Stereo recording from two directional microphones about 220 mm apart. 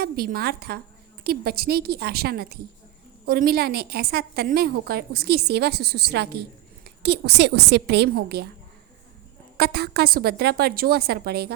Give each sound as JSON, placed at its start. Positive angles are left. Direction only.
{"t": 0.0, "sound": "a woman's voice", "side_deg": -45}
{"t": 9.6, "sound": "a woman's voice", "side_deg": -45}